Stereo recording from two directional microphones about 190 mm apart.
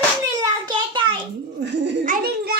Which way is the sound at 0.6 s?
25° right (ahead or behind).